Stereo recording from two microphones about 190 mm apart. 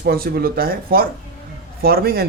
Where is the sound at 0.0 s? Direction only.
55° right (ahead or behind).